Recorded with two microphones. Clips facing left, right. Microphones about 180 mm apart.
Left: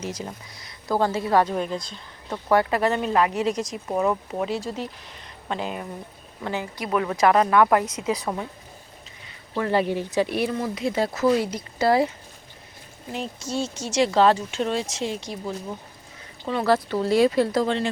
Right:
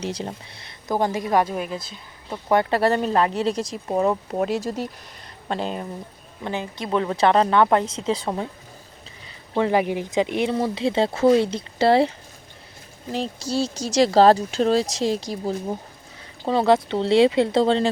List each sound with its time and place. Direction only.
0.0 s speech: 30° right (ahead or behind)
0.9 s speech: 15° right (ahead or behind)
2.5 s speech: 25° right (ahead or behind)
4.4 s speech: 45° right (ahead or behind)
5.5 s speech: 30° right (ahead or behind)
6.4 s speech: 20° right (ahead or behind)
9.6 s speech: 15° right (ahead or behind)
10.5 s speech: 30° right (ahead or behind)
16.5 s speech: 25° right (ahead or behind)